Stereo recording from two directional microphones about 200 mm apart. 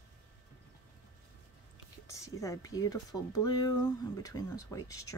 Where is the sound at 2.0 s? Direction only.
15° left (ahead or behind).